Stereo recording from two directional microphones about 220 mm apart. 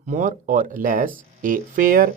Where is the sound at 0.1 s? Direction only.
35° right (ahead or behind).